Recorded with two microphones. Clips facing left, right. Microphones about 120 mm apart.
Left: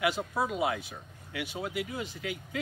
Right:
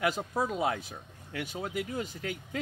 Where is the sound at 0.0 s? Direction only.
40° right (ahead or behind).